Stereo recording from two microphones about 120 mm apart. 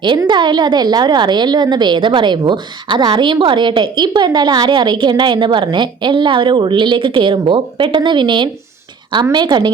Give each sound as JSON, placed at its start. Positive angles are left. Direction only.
{"t": 0.3, "sound": "a woman's voice", "side_deg": -40}